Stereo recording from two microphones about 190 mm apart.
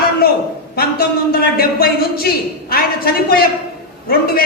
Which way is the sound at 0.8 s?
55° left (ahead or behind).